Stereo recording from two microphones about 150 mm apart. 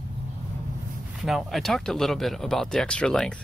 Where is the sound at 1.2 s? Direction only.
Centre (ahead or behind).